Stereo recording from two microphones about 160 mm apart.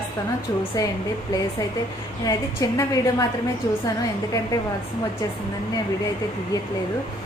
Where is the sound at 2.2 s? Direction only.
20° left (ahead or behind).